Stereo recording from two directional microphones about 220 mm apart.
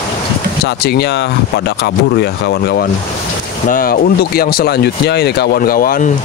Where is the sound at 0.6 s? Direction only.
50° left (ahead or behind).